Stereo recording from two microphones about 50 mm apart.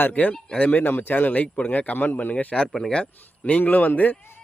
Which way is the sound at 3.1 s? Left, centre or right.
Left.